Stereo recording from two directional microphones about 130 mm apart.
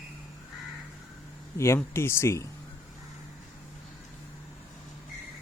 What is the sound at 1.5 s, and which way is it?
Speech, 20° left (ahead or behind).